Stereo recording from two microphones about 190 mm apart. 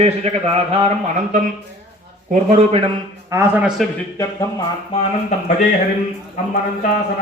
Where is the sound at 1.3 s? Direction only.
45° right (ahead or behind).